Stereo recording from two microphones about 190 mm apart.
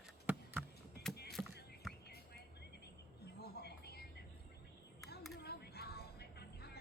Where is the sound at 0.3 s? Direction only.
10° right (ahead or behind).